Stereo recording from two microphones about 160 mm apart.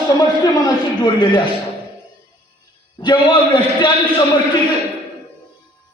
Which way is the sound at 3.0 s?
30° left (ahead or behind).